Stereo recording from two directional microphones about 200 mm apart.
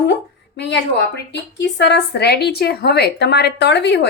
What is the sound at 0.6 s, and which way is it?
A woman's voice, 60° left (ahead or behind).